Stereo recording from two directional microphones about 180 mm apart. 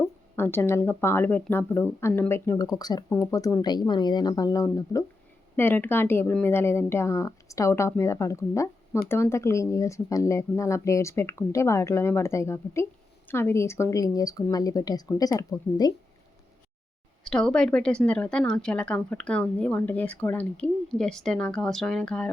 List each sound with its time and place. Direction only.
0.3 s a woman's voice: 10° left (ahead or behind)
17.2 s speech: 5° left (ahead or behind)